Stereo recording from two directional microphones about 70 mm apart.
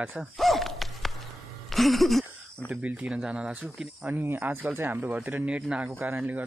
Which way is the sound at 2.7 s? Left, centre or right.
Centre.